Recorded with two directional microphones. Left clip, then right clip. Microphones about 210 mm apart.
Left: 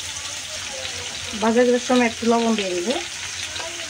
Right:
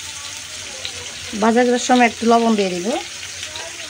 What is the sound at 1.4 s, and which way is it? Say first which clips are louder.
Speech: right 2 dB; 50° right (ahead or behind).